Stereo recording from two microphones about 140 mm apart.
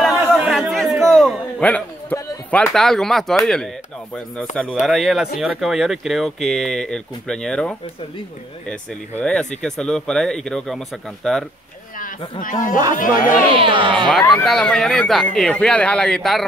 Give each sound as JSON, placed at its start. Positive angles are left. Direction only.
{"t": 0.0, "sound": "chatter", "side_deg": 0}
{"t": 0.4, "sound": "a sound", "side_deg": 0}
{"t": 2.5, "sound": "speech", "side_deg": 5}
{"t": 9.2, "sound": "speech", "side_deg": 5}
{"t": 12.0, "sound": "a man's voice", "side_deg": 70}
{"t": 13.5, "sound": "speech", "side_deg": -40}
{"t": 14.3, "sound": "speech", "side_deg": 0}